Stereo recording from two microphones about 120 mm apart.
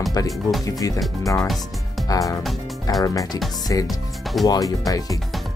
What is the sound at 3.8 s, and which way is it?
Speech, centre (ahead or behind).